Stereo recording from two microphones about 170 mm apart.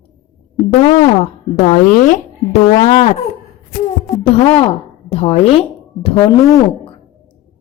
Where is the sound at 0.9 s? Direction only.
45° left (ahead or behind).